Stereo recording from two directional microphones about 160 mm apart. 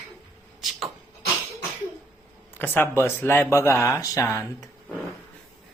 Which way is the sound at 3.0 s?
15° left (ahead or behind).